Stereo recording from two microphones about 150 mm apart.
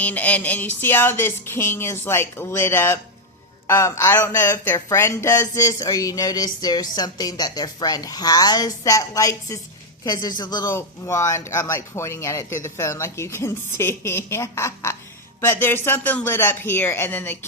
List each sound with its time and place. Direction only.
0.0 s speech: 10° left (ahead or behind)